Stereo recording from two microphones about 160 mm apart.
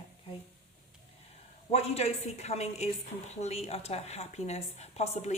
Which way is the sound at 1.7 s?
40° left (ahead or behind).